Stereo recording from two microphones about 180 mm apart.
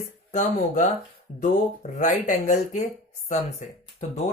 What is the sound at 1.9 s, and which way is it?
Speech, 45° left (ahead or behind).